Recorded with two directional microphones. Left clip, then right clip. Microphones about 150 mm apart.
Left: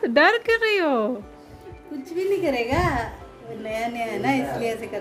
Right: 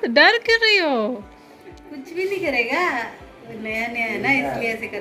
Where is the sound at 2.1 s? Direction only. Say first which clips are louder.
Right 1 dB; 90° left.